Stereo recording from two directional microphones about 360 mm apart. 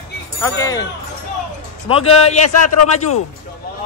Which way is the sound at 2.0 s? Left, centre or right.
Left.